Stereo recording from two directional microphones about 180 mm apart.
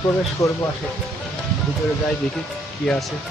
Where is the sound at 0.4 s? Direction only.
15° left (ahead or behind).